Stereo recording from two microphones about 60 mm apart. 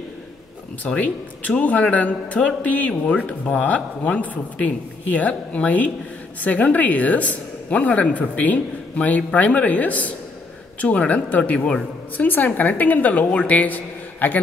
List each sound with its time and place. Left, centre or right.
0.8 s a man's voice: left